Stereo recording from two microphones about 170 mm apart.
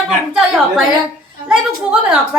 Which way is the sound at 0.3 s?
5° right (ahead or behind).